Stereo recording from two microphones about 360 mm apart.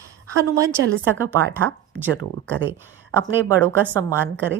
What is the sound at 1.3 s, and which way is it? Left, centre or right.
Speech, centre.